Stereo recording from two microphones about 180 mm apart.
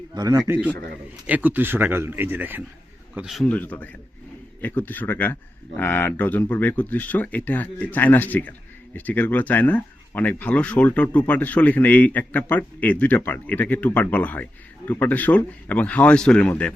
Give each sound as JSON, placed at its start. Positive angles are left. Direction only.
{"t": 0.1, "sound": "a man's voice", "side_deg": -20}
{"t": 1.3, "sound": "a man's voice", "side_deg": -10}
{"t": 3.4, "sound": "speech", "side_deg": 10}